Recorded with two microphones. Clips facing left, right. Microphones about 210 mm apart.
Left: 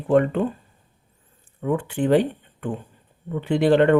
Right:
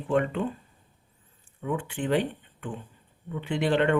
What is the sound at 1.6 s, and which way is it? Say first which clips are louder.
Speech: left 7 dB; 40° left (ahead or behind).